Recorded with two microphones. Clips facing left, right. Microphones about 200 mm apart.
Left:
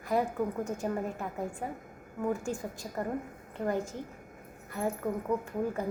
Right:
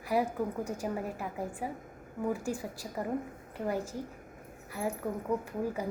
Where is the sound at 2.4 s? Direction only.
35° right (ahead or behind).